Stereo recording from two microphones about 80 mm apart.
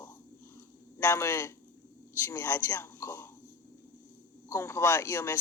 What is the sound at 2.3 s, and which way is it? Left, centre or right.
Speech, left.